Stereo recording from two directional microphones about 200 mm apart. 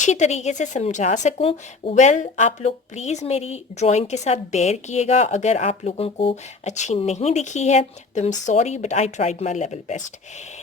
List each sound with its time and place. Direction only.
0.0 s speech: 35° left (ahead or behind)